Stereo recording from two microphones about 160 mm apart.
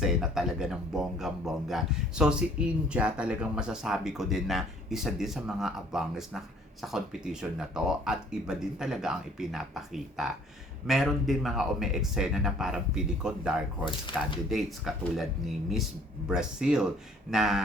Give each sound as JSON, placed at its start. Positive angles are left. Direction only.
{"t": 0.0, "sound": "speech", "side_deg": -5}
{"t": 14.1, "sound": "speech", "side_deg": 30}
{"t": 14.5, "sound": "speech", "side_deg": 0}